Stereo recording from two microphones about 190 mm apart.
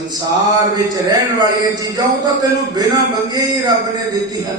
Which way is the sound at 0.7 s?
20° right (ahead or behind).